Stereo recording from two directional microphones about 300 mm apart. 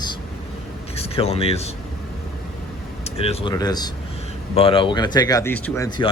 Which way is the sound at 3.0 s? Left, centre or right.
Centre.